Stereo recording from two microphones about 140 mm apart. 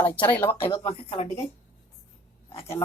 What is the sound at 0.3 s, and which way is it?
Speech, 15° left (ahead or behind).